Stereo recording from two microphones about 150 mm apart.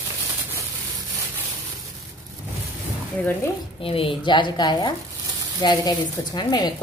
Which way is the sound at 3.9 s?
40° left (ahead or behind).